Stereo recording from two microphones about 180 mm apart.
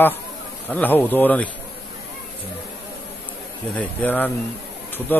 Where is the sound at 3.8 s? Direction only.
10° left (ahead or behind).